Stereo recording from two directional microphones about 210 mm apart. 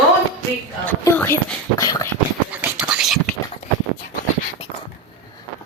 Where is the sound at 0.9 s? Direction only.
10° left (ahead or behind).